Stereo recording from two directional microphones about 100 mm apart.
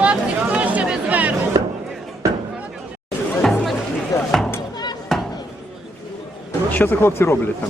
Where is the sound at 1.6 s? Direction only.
50° right (ahead or behind).